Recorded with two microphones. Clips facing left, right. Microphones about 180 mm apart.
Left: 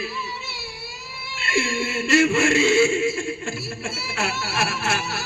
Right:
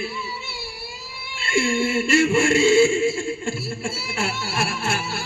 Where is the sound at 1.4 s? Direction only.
30° right (ahead or behind).